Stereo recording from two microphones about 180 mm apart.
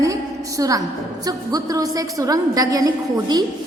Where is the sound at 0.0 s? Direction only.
20° right (ahead or behind).